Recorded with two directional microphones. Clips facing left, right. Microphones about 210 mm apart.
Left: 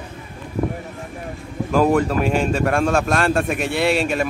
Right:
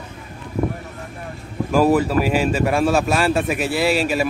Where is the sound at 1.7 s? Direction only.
5° right (ahead or behind).